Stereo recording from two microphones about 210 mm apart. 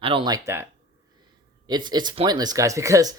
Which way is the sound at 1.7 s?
20° right (ahead or behind).